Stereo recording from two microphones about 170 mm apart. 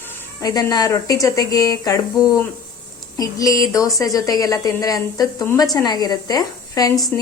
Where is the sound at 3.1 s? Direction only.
20° left (ahead or behind).